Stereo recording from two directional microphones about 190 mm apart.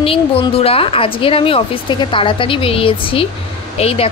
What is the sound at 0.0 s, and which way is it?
A woman's voice, 30° left (ahead or behind).